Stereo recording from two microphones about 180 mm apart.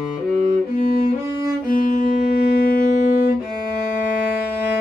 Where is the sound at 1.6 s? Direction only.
50° left (ahead or behind).